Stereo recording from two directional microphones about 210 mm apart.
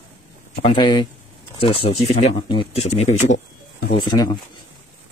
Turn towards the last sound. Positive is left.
turn(degrees=25)  # may be behind; listen again after turning